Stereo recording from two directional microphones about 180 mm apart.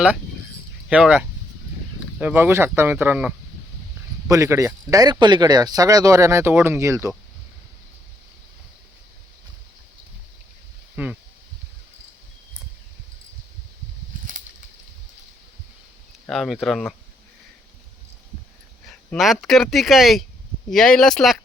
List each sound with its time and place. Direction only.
0.9 s speech: 5° right (ahead or behind)
10.9 s speech: 5° right (ahead or behind)
16.2 s speech: centre (ahead or behind)
18.9 s speech: centre (ahead or behind)